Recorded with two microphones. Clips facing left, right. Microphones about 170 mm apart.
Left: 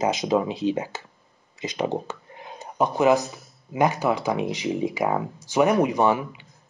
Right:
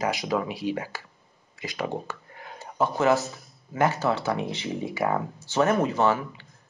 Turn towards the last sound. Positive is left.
turn(degrees=15)  # may be behind; listen again after turning